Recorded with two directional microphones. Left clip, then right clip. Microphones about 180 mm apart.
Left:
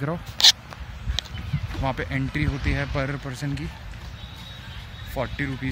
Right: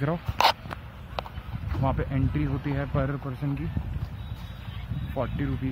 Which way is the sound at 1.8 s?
10° left (ahead or behind).